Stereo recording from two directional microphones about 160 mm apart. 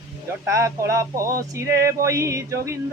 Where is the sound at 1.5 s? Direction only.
20° right (ahead or behind).